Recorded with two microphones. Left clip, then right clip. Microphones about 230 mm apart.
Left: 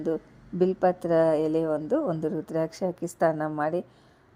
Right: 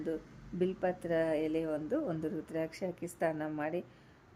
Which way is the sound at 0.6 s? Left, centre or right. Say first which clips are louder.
Left 10 dB; left.